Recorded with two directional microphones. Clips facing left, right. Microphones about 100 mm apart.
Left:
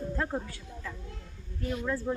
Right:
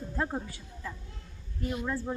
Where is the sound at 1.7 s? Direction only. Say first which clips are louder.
Left 2 dB; 10° right (ahead or behind).